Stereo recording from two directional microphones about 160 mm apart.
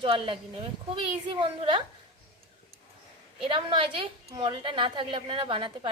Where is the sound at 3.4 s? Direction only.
30° right (ahead or behind).